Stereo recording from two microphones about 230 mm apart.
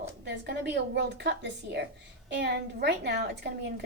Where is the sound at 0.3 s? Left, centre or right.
Right.